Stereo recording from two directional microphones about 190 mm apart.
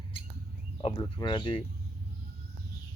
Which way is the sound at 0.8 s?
25° left (ahead or behind).